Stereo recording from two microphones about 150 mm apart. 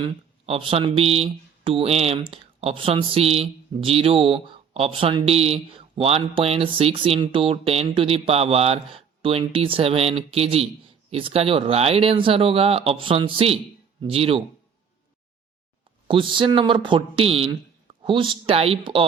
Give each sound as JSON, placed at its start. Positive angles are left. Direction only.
{"t": 0.0, "sound": "speech", "side_deg": -40}
{"t": 16.0, "sound": "speech", "side_deg": -35}